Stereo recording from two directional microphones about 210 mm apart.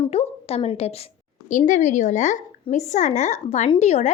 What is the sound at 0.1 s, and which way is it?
A woman's voice, 30° left (ahead or behind).